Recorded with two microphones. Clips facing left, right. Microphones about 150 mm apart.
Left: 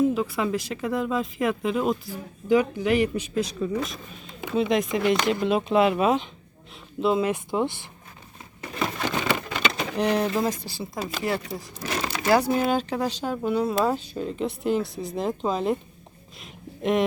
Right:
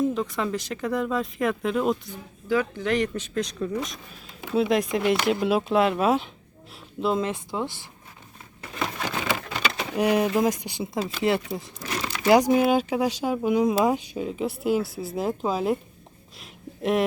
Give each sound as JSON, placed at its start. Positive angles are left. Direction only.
{"t": 0.0, "sound": "speech", "side_deg": 5}
{"t": 2.5, "sound": "speech", "side_deg": 15}
{"t": 8.8, "sound": "a sound", "side_deg": -5}
{"t": 11.2, "sound": "speech", "side_deg": -20}
{"t": 11.8, "sound": "crumpling", "side_deg": 25}
{"t": 12.3, "sound": "speech", "side_deg": -15}
{"t": 16.4, "sound": "a sound", "side_deg": 0}